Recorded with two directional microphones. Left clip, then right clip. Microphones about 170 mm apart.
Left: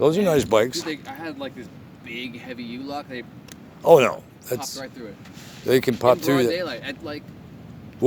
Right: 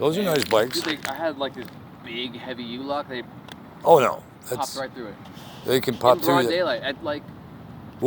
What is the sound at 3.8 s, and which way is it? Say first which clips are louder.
Speech: left 2 dB; 55° left (ahead or behind).